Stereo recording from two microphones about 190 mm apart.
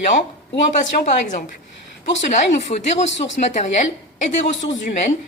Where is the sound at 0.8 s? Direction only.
40° left (ahead or behind).